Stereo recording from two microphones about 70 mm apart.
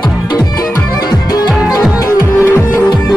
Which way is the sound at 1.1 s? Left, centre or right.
Left.